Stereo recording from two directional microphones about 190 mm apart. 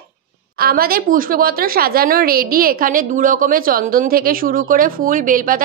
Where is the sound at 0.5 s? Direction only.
50° right (ahead or behind).